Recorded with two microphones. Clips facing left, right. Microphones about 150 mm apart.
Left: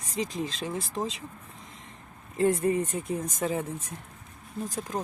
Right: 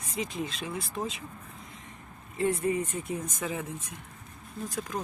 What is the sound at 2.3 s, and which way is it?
Speech, 40° left (ahead or behind).